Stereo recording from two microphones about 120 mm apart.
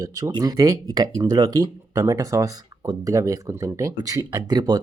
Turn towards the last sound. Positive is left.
turn(degrees=-35)  # may be behind; listen again after turning